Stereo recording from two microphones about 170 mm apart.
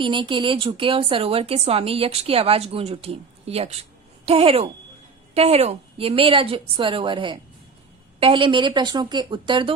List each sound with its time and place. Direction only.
0.0 s a woman's voice: 30° right (ahead or behind)